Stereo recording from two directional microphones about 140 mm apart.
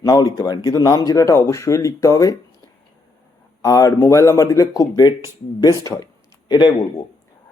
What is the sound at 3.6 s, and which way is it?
Speech, 25° left (ahead or behind).